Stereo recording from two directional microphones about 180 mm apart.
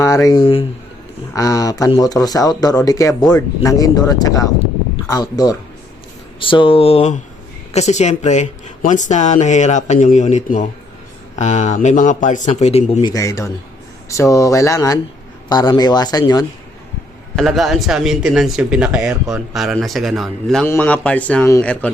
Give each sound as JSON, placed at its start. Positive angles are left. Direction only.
{"t": 0.0, "sound": "speech", "side_deg": 20}
{"t": 13.0, "sound": "speech", "side_deg": 20}
{"t": 17.3, "sound": "speech", "side_deg": 0}